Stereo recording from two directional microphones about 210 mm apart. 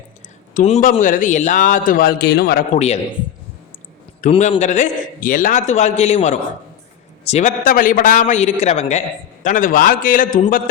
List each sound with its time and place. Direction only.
0.5 s a man's voice: 35° left (ahead or behind)
2.7 s a man's voice: 30° left (ahead or behind)
4.2 s a man's voice: 35° left (ahead or behind)